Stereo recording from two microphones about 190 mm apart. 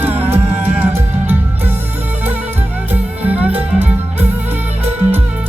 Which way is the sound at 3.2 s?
10° right (ahead or behind).